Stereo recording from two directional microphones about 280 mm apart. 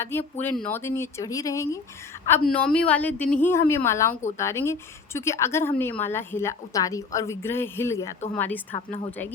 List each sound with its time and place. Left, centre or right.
0.0 s a woman's voice: centre
8.7 s a woman's voice: centre